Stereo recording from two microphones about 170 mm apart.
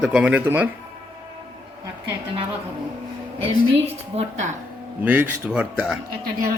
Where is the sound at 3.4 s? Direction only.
35° right (ahead or behind).